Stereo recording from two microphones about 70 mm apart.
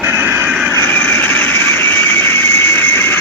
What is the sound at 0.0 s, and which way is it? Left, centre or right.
Vehicle, right.